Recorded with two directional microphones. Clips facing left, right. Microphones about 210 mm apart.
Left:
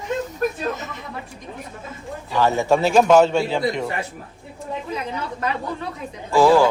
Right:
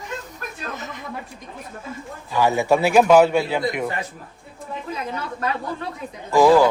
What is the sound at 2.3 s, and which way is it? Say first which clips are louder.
A man's voice: even; 15° right (ahead or behind).